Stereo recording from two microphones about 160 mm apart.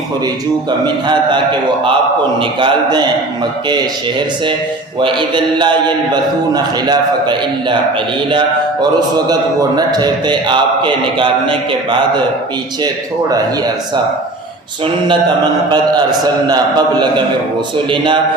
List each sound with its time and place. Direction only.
1.0 s a man's voice: 30° right (ahead or behind)
2.4 s a man's voice: 30° right (ahead or behind)
4.9 s a man's voice: 30° right (ahead or behind)
15.7 s a man's voice: 25° right (ahead or behind)